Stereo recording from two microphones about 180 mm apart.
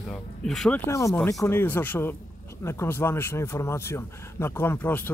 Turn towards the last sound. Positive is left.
turn(degrees=10)  # may be behind; listen again after turning